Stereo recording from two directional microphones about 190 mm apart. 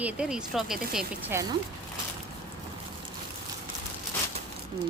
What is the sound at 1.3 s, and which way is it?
Speech, 15° right (ahead or behind).